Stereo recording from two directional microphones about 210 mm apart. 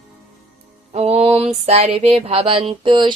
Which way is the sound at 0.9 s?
30° right (ahead or behind).